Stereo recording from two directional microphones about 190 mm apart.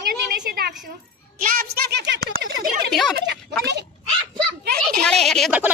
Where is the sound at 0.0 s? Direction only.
55° right (ahead or behind).